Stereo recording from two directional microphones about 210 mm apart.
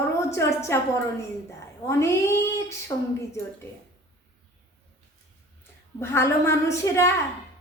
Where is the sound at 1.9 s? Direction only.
15° left (ahead or behind).